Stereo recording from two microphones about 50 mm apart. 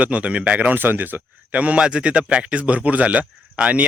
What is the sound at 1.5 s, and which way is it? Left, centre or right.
Speech, right.